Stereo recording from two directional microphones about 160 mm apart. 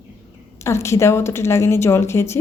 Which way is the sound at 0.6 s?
15° left (ahead or behind).